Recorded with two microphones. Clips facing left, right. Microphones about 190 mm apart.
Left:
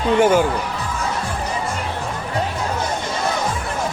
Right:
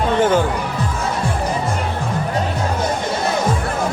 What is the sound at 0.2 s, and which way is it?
Speech, 10° left (ahead or behind).